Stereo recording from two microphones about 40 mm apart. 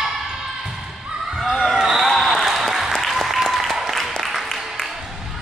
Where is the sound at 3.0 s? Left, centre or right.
Centre.